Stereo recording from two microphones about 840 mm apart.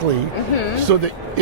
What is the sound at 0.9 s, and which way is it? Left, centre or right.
Speech, right.